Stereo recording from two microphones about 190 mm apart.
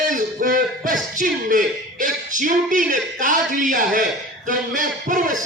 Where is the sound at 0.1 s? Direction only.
45° right (ahead or behind).